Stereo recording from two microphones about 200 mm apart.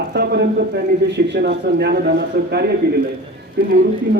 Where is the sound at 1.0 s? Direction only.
60° right (ahead or behind).